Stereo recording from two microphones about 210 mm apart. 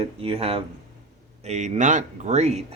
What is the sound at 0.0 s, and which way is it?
Speech, 25° right (ahead or behind).